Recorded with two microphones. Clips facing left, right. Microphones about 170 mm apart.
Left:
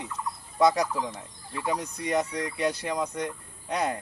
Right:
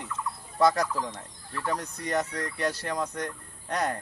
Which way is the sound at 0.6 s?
10° left (ahead or behind).